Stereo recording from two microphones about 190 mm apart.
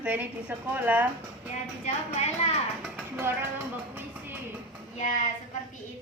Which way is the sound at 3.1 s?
10° right (ahead or behind).